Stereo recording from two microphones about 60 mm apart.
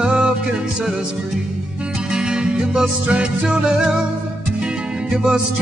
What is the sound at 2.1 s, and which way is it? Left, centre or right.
Music, centre.